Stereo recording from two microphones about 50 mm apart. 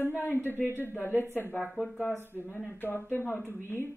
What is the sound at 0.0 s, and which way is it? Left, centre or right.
Speech, left.